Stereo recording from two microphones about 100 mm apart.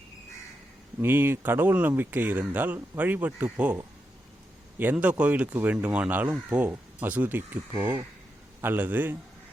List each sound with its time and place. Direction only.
1.0 s speech: 20° right (ahead or behind)
8.6 s speech: 20° right (ahead or behind)